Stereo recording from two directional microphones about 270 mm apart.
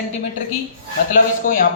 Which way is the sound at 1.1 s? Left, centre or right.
Left.